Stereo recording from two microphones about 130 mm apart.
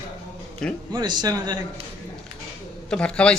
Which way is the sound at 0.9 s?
35° right (ahead or behind).